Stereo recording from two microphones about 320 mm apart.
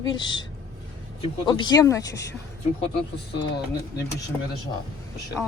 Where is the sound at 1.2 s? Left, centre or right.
Centre.